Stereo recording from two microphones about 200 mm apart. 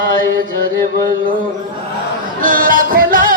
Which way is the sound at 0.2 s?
45° right (ahead or behind).